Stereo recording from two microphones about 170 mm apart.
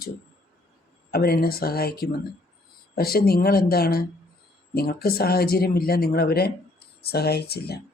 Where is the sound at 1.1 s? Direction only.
65° left (ahead or behind).